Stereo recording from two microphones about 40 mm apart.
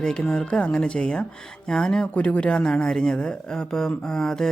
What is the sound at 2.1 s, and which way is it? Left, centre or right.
Speech, left.